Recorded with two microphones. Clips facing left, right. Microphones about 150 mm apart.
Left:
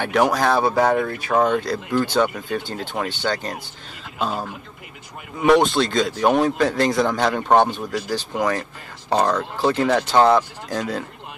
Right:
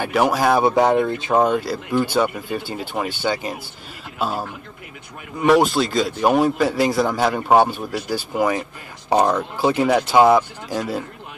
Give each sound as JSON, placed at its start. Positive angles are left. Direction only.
{"t": 0.0, "sound": "speech", "side_deg": -5}
{"t": 0.7, "sound": "speech", "side_deg": -20}
{"t": 1.4, "sound": "speech", "side_deg": -5}